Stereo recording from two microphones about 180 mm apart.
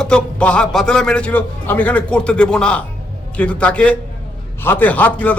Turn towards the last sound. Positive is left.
turn(degrees=10)  # may be behind; listen again after turning